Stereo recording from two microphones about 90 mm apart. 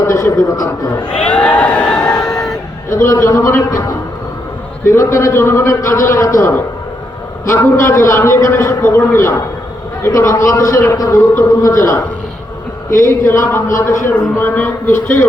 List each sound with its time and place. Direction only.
0.0 s a man's voice: 35° left (ahead or behind)
1.3 s a sound: 15° left (ahead or behind)
3.0 s a man's voice: 30° left (ahead or behind)
13.1 s a man's voice: 30° left (ahead or behind)